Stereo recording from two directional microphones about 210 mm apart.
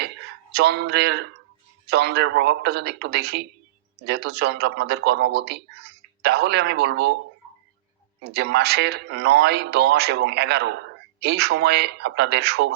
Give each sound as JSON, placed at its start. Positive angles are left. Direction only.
{"t": 0.5, "sound": "speech", "side_deg": -50}
{"t": 8.2, "sound": "speech", "side_deg": -50}